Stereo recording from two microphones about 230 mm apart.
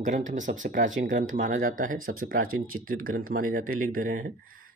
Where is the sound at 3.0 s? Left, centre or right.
Right.